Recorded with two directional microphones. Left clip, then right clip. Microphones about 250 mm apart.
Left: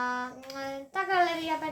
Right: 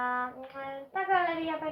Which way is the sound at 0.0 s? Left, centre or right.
Left.